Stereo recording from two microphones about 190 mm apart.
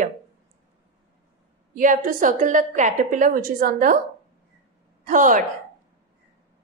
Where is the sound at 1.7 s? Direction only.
45° right (ahead or behind).